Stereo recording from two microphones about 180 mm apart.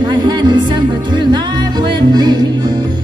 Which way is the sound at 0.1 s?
25° right (ahead or behind).